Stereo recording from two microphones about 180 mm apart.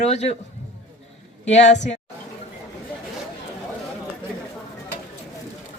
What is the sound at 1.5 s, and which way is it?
Speech, 40° left (ahead or behind).